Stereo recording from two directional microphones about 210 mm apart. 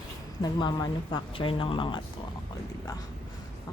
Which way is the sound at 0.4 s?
20° left (ahead or behind).